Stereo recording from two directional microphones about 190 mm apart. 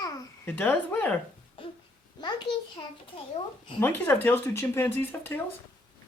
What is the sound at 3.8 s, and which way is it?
Speech, 10° left (ahead or behind).